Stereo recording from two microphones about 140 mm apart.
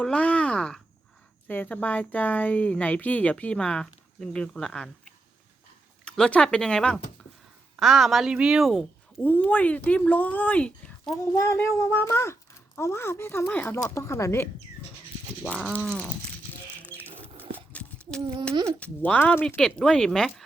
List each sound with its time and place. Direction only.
0.0 s speech: 10° left (ahead or behind)
6.1 s speech: 5° left (ahead or behind)
11.3 s speech: 20° left (ahead or behind)
15.7 s speech: 5° left (ahead or behind)
16.9 s a sound: 10° left (ahead or behind)
18.8 s speech: 10° left (ahead or behind)